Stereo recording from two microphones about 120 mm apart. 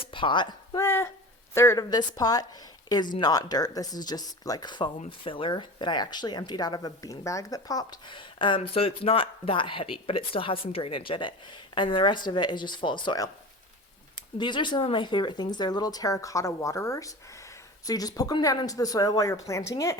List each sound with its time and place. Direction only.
0.1 s speech: 45° left (ahead or behind)
0.8 s speech: 20° left (ahead or behind)
14.3 s speech: 40° left (ahead or behind)